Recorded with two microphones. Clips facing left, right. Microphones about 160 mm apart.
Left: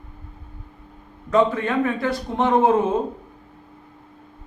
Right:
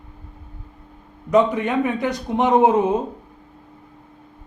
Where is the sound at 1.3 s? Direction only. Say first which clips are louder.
Right 2 dB; 15° right (ahead or behind).